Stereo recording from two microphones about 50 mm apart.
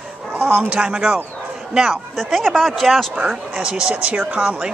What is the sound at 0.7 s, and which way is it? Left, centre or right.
Speech, centre.